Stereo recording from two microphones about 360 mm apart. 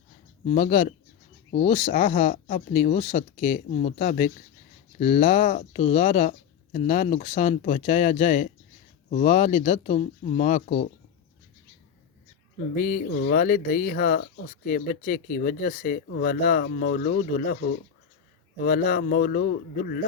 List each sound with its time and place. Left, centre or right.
0.4 s speech: centre
12.7 s speech: left